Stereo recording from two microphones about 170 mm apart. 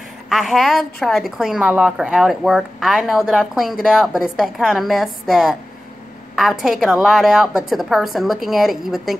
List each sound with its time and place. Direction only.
0.3 s a woman's voice: centre (ahead or behind)